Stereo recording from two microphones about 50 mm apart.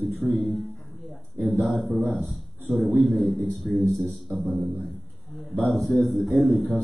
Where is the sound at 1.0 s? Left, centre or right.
Left.